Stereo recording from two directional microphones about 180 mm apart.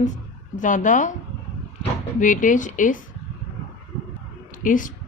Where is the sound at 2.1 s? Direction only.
45° left (ahead or behind).